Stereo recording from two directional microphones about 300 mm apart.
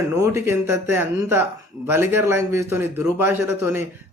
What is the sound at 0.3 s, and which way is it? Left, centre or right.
Speech, centre.